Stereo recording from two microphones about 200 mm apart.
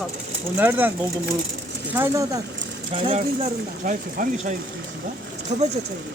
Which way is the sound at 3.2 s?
40° right (ahead or behind).